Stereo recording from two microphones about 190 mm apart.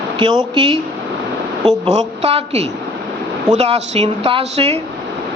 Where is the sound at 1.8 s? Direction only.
35° right (ahead or behind).